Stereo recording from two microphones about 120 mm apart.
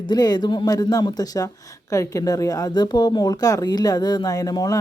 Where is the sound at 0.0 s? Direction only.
35° left (ahead or behind).